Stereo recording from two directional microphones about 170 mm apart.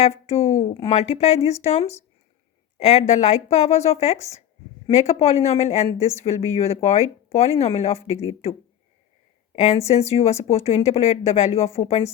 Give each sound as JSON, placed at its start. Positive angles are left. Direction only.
{"t": 0.3, "sound": "speech", "side_deg": 40}
{"t": 9.6, "sound": "speech", "side_deg": 40}